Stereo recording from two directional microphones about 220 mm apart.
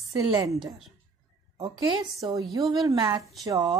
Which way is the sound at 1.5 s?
20° right (ahead or behind).